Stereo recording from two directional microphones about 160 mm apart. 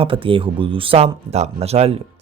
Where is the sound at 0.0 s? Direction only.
35° right (ahead or behind).